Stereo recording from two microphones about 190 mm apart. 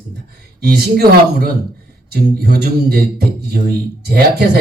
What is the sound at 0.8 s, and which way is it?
Speech, 55° right (ahead or behind).